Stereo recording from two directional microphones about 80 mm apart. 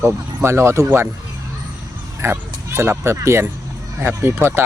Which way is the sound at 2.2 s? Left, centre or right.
Right.